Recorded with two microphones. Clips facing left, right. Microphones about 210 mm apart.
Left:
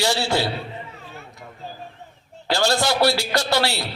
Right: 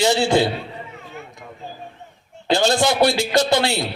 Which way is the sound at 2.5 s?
20° right (ahead or behind).